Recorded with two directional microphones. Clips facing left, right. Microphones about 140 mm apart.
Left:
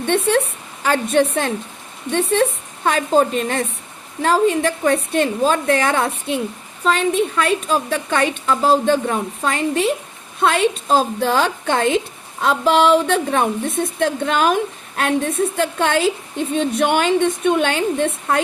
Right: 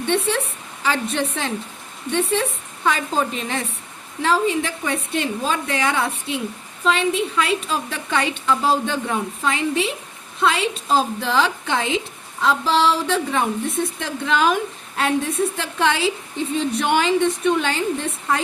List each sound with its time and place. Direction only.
0.0 s a woman's voice: 50° left (ahead or behind)